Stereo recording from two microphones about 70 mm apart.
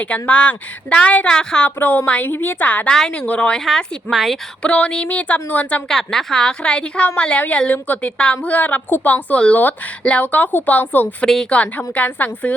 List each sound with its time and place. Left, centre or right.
0.0 s a woman's voice: centre
1.8 s a woman's voice: left
3.6 s speech: centre
4.6 s a woman's voice: centre
5.9 s a woman's voice: centre